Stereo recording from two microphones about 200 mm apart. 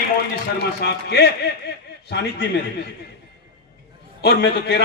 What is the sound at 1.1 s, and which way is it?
Speech, 55° left (ahead or behind).